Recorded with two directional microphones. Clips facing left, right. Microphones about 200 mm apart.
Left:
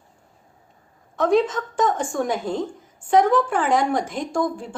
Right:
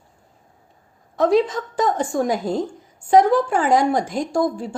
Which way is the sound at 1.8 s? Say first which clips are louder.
Right 2 dB; 40° right (ahead or behind).